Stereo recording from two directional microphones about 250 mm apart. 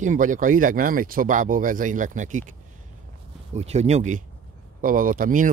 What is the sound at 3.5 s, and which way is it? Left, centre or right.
Speech, right.